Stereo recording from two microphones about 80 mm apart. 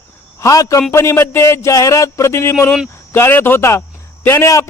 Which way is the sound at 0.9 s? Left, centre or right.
Left.